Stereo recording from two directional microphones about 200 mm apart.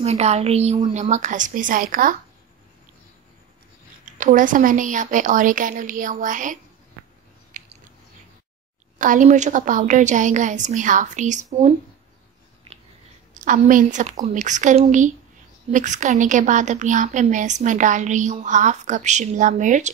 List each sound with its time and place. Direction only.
0.0 s a woman's voice: 30° right (ahead or behind)
4.0 s a woman's voice: 40° right (ahead or behind)
7.5 s biting: 40° right (ahead or behind)
8.9 s a woman's voice: 40° right (ahead or behind)
13.4 s a woman's voice: 40° right (ahead or behind)